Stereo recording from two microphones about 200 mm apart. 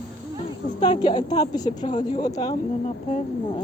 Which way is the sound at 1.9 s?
35° left (ahead or behind).